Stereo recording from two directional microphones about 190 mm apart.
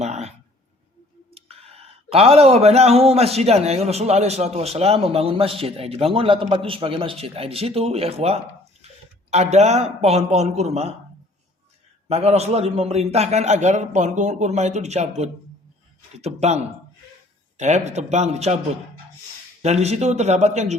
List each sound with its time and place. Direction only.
0.0 s a sound: 35° right (ahead or behind)
1.3 s speech: 30° right (ahead or behind)
12.0 s speech: 35° right (ahead or behind)
19.6 s speech: 35° right (ahead or behind)